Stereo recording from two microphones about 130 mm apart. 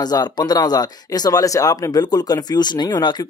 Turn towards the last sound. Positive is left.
turn(degrees=35)  # may be behind; listen again after turning